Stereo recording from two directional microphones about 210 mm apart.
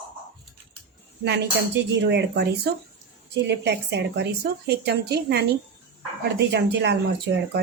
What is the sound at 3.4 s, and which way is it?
A woman's voice, 55° right (ahead or behind).